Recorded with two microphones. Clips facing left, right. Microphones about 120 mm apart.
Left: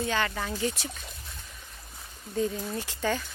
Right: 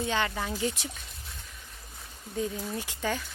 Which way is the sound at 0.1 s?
20° right (ahead or behind).